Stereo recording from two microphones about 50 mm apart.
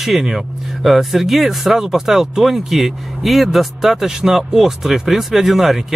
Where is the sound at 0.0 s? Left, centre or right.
Centre.